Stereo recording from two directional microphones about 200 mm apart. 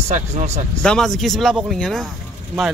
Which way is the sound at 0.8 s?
Centre (ahead or behind).